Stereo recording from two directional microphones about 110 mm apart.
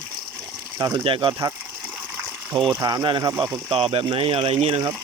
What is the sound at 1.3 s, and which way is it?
Speech, 35° right (ahead or behind).